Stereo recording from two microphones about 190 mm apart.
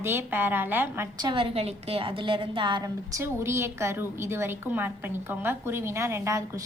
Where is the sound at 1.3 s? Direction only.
30° right (ahead or behind).